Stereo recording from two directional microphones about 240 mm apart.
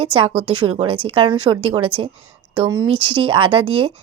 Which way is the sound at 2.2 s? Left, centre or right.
Centre.